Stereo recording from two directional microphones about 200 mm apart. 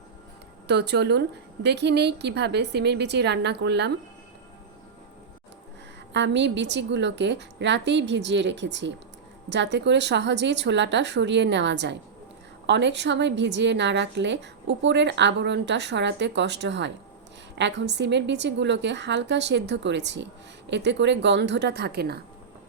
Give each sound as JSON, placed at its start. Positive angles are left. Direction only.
{"t": 0.7, "sound": "a woman's voice", "side_deg": -55}
{"t": 6.1, "sound": "a woman's voice", "side_deg": -65}